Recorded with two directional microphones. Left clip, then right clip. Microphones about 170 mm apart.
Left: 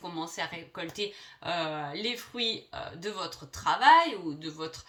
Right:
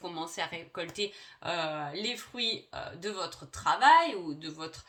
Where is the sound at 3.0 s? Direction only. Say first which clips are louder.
Even; 40° right (ahead or behind).